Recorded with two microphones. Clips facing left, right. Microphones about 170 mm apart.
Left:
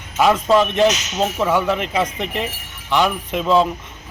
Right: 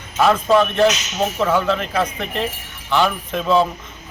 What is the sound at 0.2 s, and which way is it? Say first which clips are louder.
Cutlery: even; 15° left (ahead or behind).